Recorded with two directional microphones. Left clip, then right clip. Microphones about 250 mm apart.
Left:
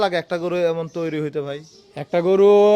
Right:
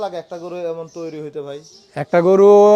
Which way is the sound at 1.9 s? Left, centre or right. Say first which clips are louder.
Right 5 dB; right.